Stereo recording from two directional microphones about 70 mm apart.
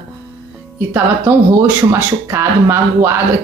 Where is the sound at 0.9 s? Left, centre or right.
Right.